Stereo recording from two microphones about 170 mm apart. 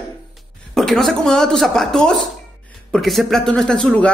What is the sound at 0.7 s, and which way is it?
Speech, centre (ahead or behind).